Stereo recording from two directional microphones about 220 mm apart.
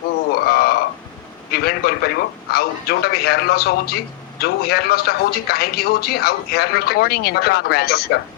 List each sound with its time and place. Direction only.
0.3 s frog: 45° left (ahead or behind)
1.5 s a man's voice: 45° left (ahead or behind)